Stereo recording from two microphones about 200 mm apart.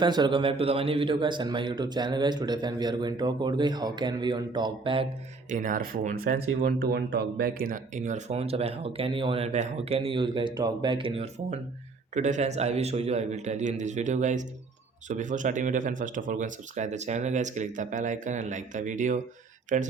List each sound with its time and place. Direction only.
0.0 s a man's voice: 20° right (ahead or behind)
5.5 s speech: 40° right (ahead or behind)